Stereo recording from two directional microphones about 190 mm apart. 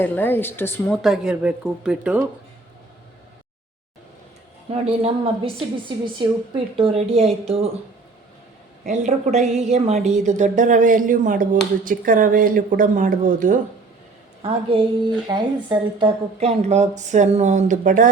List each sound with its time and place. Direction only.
0.0 s speech: 10° left (ahead or behind)
1.0 s speech: centre (ahead or behind)
4.7 s a woman's voice: 30° right (ahead or behind)
8.8 s a woman's voice: 40° right (ahead or behind)
14.4 s a woman's voice: 30° right (ahead or behind)